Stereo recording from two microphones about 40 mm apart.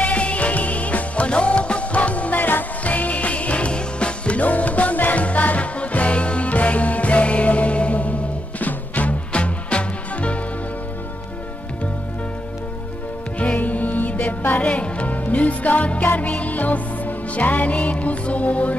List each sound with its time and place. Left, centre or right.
0.0 s music: left
2.8 s music: left
4.4 s music: left
9.3 s music: left
13.4 s music: left